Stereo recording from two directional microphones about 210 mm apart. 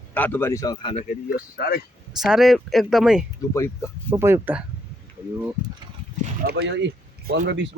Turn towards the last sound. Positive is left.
turn(degrees=-50)  # may be behind; listen again after turning